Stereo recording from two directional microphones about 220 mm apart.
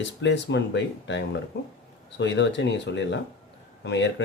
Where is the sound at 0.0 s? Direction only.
55° left (ahead or behind).